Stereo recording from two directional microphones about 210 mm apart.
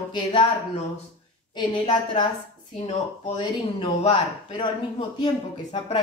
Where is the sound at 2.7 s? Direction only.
30° left (ahead or behind).